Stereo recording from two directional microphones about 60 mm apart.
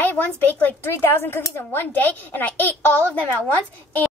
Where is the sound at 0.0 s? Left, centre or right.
Left.